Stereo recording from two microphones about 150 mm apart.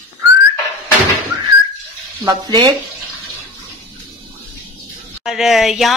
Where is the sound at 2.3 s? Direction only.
30° right (ahead or behind).